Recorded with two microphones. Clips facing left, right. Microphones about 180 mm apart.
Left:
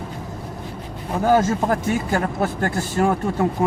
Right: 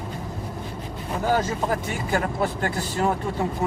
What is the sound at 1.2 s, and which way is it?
Speech, 50° left (ahead or behind).